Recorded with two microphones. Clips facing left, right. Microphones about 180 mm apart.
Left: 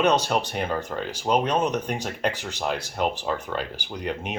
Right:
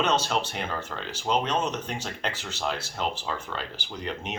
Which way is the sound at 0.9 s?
30° left (ahead or behind).